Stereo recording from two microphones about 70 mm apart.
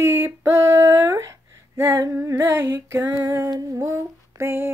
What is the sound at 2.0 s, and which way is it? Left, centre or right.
Humming, right.